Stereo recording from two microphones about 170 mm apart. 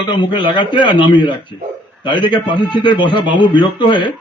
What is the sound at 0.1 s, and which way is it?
A man's voice, 30° left (ahead or behind).